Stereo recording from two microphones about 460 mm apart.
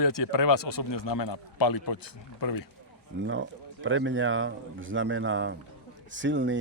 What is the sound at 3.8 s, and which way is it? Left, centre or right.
Speech, right.